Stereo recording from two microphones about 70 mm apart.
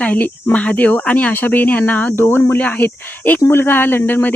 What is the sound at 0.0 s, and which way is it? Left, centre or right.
Speech, left.